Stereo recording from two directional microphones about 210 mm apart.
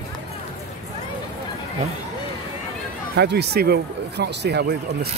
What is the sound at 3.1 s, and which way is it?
Speech, 55° right (ahead or behind).